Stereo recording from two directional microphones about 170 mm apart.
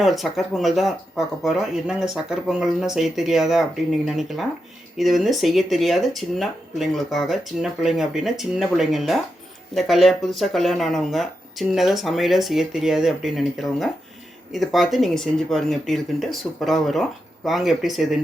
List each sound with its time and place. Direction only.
0.0 s speech: centre (ahead or behind)